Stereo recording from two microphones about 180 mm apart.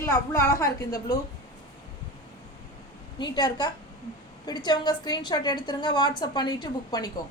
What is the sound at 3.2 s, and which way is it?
A woman's voice, 25° left (ahead or behind).